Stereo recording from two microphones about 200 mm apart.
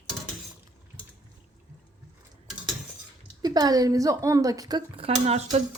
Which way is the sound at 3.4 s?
20° right (ahead or behind).